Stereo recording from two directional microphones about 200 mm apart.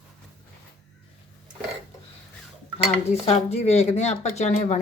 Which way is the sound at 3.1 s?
35° left (ahead or behind).